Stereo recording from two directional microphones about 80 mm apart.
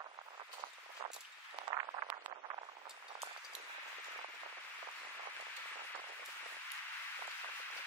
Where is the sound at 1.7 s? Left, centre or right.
Right.